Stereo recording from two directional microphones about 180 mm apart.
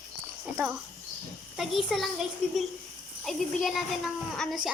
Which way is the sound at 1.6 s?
Centre (ahead or behind).